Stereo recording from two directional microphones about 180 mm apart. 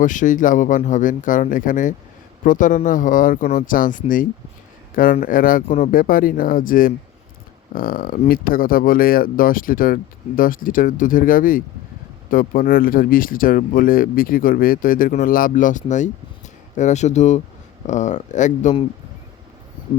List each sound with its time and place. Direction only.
0.0 s speech: 45° left (ahead or behind)